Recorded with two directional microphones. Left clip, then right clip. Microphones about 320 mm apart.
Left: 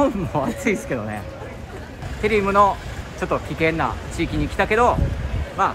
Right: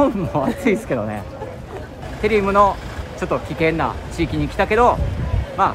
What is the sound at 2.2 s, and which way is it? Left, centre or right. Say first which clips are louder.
Speech: right 2 dB; centre.